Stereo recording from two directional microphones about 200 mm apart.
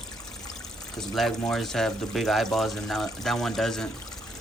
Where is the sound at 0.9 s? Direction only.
Centre (ahead or behind).